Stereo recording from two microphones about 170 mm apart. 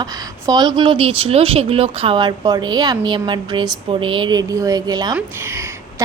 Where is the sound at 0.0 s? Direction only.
25° right (ahead or behind).